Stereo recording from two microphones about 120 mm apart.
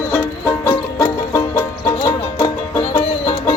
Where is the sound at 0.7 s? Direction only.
25° left (ahead or behind).